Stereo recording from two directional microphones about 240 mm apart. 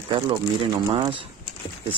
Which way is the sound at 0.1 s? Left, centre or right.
Centre.